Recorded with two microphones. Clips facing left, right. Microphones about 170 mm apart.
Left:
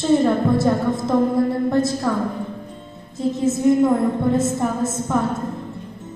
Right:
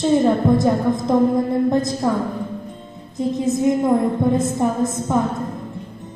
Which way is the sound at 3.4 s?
15° right (ahead or behind).